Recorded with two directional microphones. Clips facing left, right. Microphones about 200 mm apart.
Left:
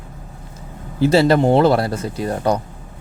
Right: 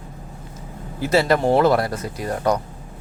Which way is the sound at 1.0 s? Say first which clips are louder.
Left 4 dB; 30° left (ahead or behind).